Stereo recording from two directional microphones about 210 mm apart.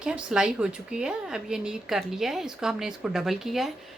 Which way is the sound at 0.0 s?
5° right (ahead or behind).